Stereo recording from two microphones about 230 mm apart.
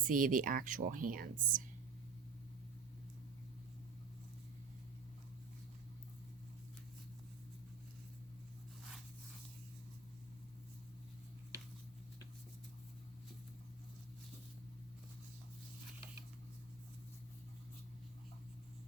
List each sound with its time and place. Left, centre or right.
0.0 s speech: right